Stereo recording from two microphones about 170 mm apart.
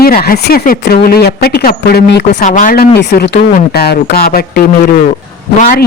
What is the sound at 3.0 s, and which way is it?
Speech, 70° left (ahead or behind).